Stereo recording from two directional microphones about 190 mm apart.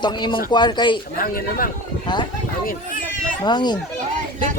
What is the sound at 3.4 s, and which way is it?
Speech, 20° left (ahead or behind).